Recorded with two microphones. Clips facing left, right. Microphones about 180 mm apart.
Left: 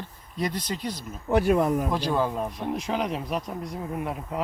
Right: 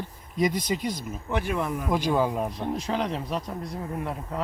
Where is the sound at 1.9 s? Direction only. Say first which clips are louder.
Right 1 dB; 10° right (ahead or behind).